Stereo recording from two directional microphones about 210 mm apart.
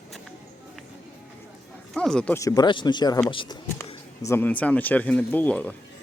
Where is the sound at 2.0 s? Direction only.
5° left (ahead or behind); by 3.6 s 25° left (ahead or behind).